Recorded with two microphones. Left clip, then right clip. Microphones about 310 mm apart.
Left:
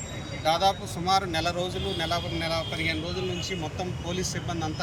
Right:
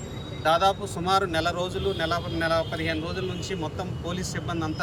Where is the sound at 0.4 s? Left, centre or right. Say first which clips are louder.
Right 2 dB; centre.